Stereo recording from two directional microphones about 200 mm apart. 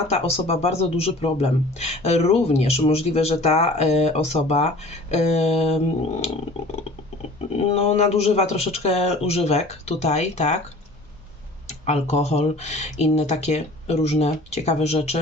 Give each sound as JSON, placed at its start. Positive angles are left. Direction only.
{"t": 0.1, "sound": "speech", "side_deg": 30}
{"t": 7.5, "sound": "speech", "side_deg": 30}
{"t": 11.9, "sound": "speech", "side_deg": 35}